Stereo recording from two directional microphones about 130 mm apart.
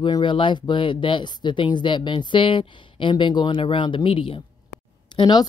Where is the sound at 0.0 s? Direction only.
40° left (ahead or behind).